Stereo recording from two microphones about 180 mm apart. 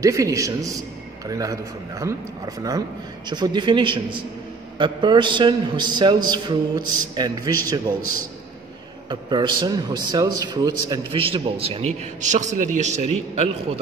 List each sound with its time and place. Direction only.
0.0 s a man's voice: 15° right (ahead or behind)
9.1 s a man's voice: 25° right (ahead or behind)